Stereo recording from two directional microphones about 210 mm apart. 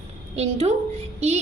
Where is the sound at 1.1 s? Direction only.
30° right (ahead or behind).